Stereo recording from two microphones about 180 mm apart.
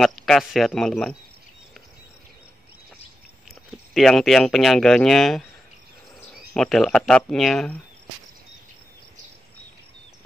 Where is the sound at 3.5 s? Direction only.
Centre (ahead or behind).